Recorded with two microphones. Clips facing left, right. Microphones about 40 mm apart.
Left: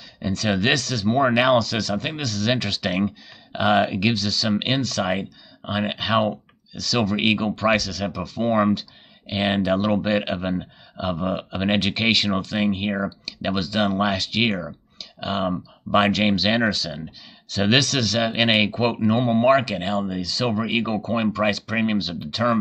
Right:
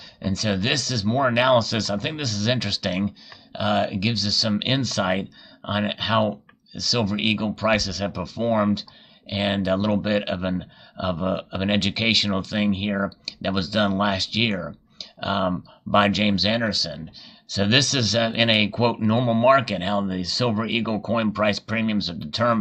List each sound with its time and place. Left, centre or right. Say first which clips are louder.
0.2 s a sound: left 1 dB; centre
0.7 s speech: left 2 dB; centre
3.5 s speech: left 3 dB; left
4.1 s speech: left 1 dB; centre
15.1 s speech: right 1 dB; centre